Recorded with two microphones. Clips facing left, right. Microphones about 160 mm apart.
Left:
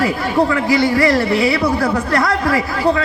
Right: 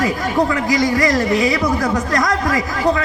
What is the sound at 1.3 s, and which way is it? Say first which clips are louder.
Speech: left 1 dB; 35° left (ahead or behind).